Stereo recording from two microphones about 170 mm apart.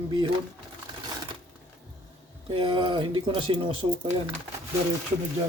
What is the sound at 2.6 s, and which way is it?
Speech, 30° right (ahead or behind).